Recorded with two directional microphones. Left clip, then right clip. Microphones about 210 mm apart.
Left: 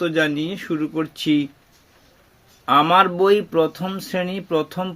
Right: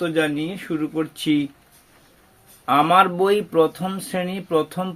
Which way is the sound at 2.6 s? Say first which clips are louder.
Left 1 dB; 25° left (ahead or behind).